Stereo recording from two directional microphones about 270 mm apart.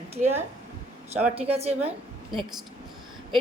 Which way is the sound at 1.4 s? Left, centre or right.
Right.